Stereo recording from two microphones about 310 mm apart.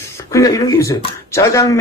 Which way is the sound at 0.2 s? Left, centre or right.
Centre.